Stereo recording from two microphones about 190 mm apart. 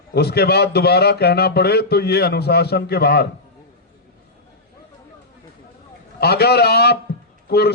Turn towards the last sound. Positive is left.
turn(degrees=60)  # may be behind; listen again after turning